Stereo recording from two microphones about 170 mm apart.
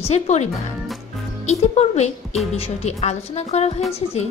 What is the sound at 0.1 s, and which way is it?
Speech, 40° left (ahead or behind).